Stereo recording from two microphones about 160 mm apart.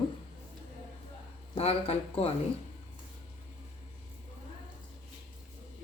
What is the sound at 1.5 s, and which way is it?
Speech, 40° left (ahead or behind).